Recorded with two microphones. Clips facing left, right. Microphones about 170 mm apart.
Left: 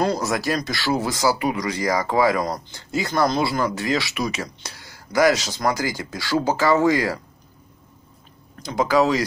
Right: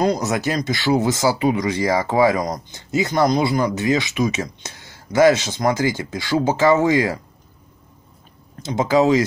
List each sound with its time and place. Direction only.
0.0 s speech: 20° right (ahead or behind)
8.6 s speech: 25° right (ahead or behind)